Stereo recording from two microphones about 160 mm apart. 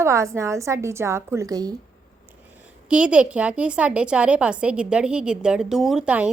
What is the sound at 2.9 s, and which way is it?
A woman's voice, 5° right (ahead or behind).